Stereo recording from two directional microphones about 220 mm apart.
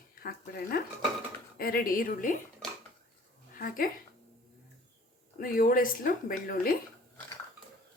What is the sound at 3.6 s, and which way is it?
Speech, 40° left (ahead or behind).